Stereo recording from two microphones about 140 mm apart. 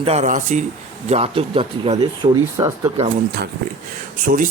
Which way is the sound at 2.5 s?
20° right (ahead or behind).